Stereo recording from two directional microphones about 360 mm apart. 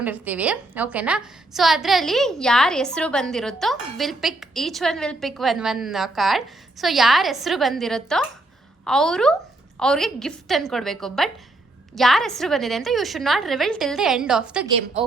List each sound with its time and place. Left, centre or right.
0.0 s a woman's voice: centre